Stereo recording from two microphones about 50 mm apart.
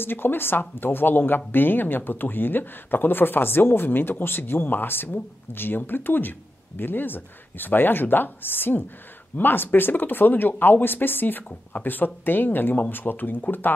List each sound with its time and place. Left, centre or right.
0.0 s speech: left